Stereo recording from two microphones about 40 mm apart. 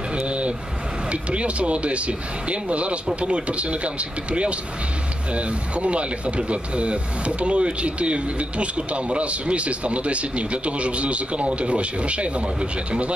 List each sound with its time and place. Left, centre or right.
0.1 s vehicle: right
1.1 s speech: right